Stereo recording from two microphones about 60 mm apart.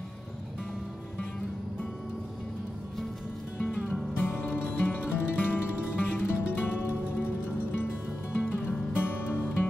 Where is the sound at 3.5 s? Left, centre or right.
Left.